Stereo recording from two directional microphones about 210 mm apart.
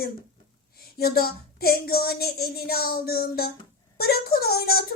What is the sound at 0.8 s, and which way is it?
Speech, 45° left (ahead or behind).